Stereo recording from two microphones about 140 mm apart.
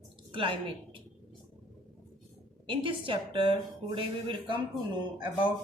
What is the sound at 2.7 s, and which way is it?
A woman's voice, 40° right (ahead or behind).